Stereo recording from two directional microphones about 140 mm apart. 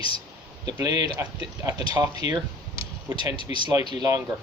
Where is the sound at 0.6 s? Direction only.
30° right (ahead or behind).